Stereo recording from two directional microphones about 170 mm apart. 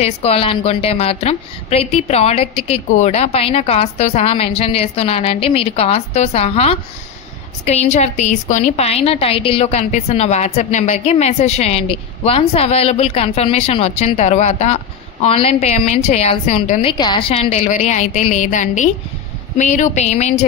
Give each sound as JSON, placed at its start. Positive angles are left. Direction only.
{"t": 0.0, "sound": "a woman's voice", "side_deg": 35}
{"t": 16.8, "sound": "a woman's voice", "side_deg": 25}